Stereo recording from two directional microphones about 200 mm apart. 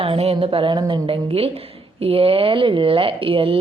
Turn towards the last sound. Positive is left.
turn(degrees=-25)  # may be behind; listen again after turning